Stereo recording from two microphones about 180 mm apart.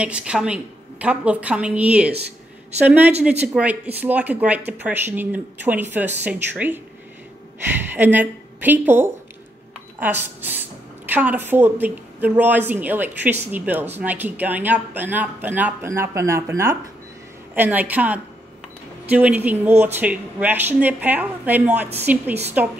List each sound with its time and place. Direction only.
0.0 s a woman's voice: 5° right (ahead or behind)
3.3 s a woman's voice: 10° right (ahead or behind)
7.9 s a woman's voice: 10° right (ahead or behind)